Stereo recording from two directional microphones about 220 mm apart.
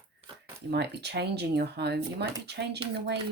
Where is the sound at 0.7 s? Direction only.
50° right (ahead or behind).